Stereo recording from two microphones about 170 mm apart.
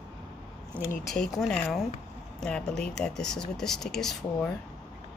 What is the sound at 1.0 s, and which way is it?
Speech, centre (ahead or behind).